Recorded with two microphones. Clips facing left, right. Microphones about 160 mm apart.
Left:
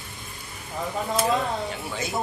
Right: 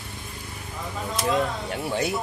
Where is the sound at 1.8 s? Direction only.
65° right (ahead or behind).